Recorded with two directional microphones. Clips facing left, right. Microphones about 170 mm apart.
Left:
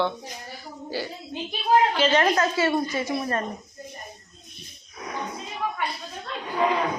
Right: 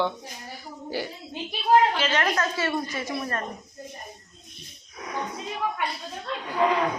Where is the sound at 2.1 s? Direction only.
25° left (ahead or behind).